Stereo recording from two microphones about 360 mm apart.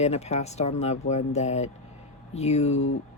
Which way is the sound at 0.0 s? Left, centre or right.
Centre.